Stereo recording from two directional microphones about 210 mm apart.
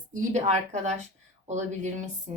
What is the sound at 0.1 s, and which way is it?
Speech, 35° right (ahead or behind).